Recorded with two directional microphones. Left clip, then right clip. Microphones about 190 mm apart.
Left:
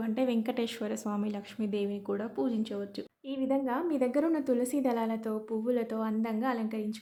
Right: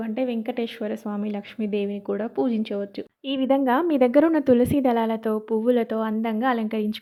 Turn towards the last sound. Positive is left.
turn(degrees=-35)  # may be behind; listen again after turning